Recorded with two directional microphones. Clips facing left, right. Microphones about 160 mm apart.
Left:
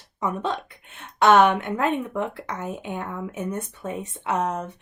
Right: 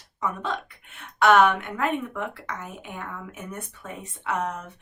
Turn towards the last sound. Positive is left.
turn(degrees=25)  # may be behind; listen again after turning